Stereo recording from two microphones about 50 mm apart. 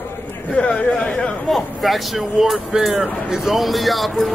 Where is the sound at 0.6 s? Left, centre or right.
Left.